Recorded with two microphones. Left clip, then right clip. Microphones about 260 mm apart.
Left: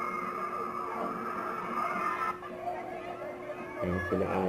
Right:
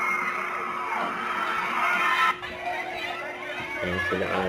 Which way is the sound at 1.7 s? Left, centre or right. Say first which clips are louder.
Right 8 dB; centre.